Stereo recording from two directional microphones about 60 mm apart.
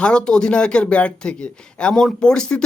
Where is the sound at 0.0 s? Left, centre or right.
Centre.